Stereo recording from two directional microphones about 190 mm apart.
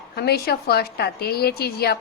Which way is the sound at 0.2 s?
55° left (ahead or behind).